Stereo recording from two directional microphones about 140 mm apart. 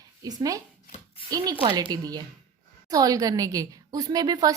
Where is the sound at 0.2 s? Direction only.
25° right (ahead or behind).